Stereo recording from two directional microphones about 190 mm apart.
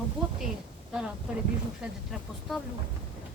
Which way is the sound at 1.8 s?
Centre (ahead or behind).